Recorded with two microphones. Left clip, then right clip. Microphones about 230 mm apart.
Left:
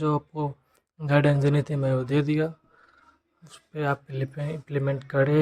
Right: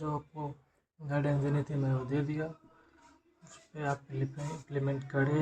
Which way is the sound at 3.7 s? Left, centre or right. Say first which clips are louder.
Left 8 dB; left.